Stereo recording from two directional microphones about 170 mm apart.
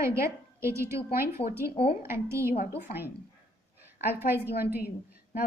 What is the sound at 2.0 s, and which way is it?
A woman's voice, 15° right (ahead or behind).